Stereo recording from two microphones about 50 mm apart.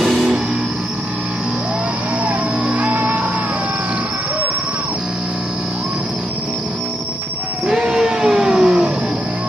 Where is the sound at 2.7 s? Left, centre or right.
Right.